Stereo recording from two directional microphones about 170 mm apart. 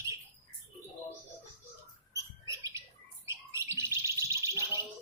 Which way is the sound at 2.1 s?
20° right (ahead or behind).